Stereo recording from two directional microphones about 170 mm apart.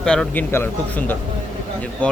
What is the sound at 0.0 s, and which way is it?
Speech, 5° left (ahead or behind).